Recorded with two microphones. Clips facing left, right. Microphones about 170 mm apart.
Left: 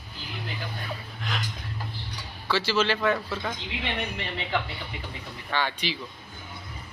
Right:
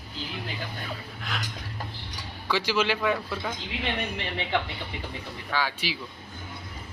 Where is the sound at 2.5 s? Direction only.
15° right (ahead or behind).